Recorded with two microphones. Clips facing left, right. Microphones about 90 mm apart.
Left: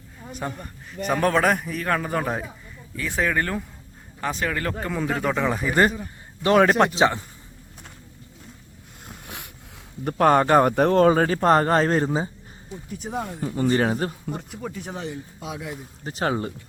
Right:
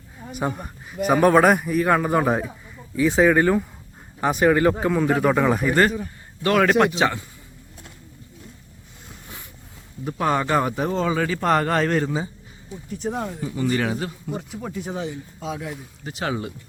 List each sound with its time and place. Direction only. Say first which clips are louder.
0.3 s a man's voice: right 5 dB; 10° right (ahead or behind)
2.9 s a man's voice: right 8 dB; 15° right (ahead or behind)
4.9 s speech: right 5 dB; centre (ahead or behind)
6.4 s speech: even; 25° left (ahead or behind)
9.0 s a sound: left 3 dB; 65° left (ahead or behind)
10.0 s a man's voice: left 5 dB; 55° left (ahead or behind); by 12.3 s 35° left (ahead or behind)
13.0 s speech: right 3 dB; centre (ahead or behind)
13.4 s speech: left 3 dB; 40° left (ahead or behind)
14.3 s speech: right 3 dB; 5° right (ahead or behind)
16.0 s speech: left 2 dB; 40° left (ahead or behind)